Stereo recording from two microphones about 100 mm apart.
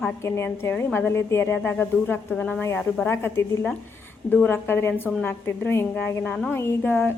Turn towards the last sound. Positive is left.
turn(degrees=20)  # may be behind; listen again after turning